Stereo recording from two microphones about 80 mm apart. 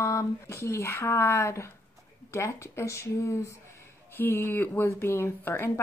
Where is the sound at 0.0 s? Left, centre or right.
Left.